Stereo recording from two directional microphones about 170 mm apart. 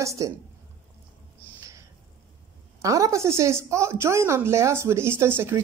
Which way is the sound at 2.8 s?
20° right (ahead or behind).